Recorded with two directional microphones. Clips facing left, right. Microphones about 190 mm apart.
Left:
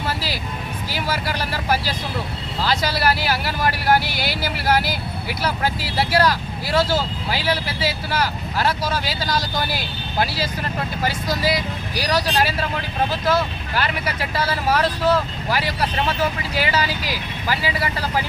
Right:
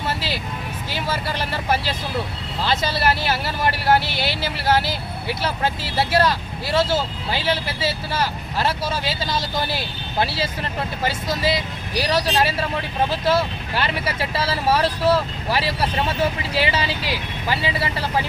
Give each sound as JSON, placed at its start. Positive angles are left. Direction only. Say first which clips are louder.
{"t": 0.1, "sound": "music", "louder": "even", "side_deg": -25}
{"t": 0.9, "sound": "speech", "louder": "left 1 dB", "side_deg": -25}